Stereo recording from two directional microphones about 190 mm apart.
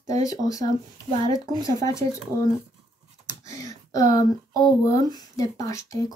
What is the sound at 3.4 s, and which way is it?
Speech, 15° left (ahead or behind).